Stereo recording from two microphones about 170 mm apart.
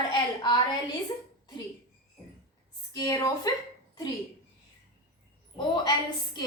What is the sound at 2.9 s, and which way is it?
Speech, 20° left (ahead or behind).